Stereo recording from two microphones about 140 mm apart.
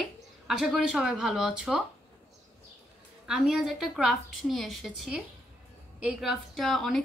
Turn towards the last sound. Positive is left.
turn(degrees=0)  # may be behind; listen again after turning